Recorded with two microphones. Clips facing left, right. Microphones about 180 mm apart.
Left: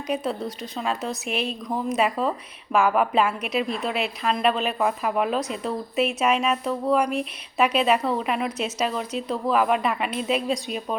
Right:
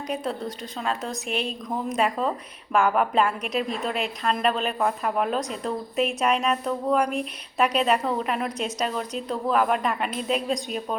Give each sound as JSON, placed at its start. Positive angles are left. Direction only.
{"t": 0.8, "sound": "a woman's voice", "side_deg": 0}
{"t": 1.3, "sound": "a woman's voice", "side_deg": -35}
{"t": 1.7, "sound": "a woman's voice", "side_deg": 5}